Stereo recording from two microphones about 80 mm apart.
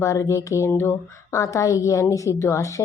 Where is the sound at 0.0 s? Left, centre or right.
Left.